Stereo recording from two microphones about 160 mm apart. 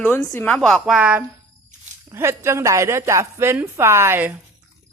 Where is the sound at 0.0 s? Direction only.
10° left (ahead or behind); by 1.2 s 5° right (ahead or behind).